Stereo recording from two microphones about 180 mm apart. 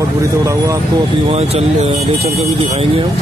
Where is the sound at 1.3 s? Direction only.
35° right (ahead or behind).